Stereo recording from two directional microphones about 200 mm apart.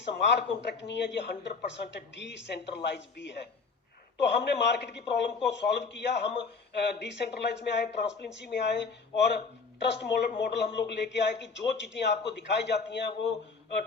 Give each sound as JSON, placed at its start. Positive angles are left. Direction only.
{"t": 0.2, "sound": "speech", "side_deg": 60}